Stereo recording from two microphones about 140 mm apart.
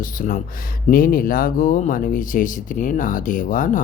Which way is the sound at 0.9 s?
90° left.